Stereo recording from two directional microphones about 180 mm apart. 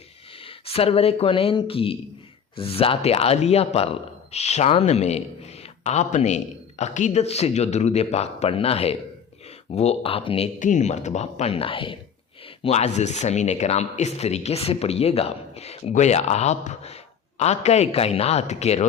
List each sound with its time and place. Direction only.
0.4 s a man's voice: 30° left (ahead or behind)
10.6 s a man's voice: 45° left (ahead or behind)